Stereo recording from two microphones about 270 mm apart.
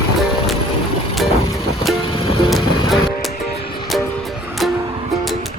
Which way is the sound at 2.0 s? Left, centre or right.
Centre.